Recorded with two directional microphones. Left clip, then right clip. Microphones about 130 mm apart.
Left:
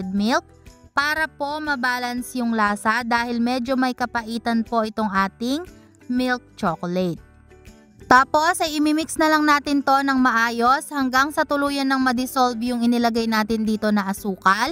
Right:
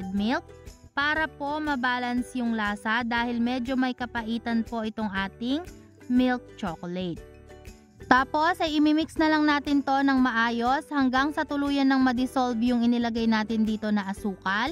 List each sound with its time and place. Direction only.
0.0 s speech: 45° left (ahead or behind)